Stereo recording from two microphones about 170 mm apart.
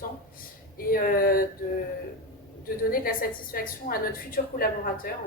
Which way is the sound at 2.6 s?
60° left (ahead or behind).